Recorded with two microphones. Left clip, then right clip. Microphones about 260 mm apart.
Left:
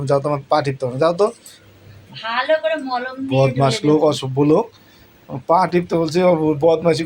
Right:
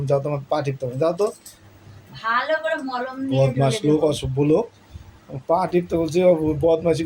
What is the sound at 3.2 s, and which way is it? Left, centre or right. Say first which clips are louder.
Speech: left 4 dB; centre.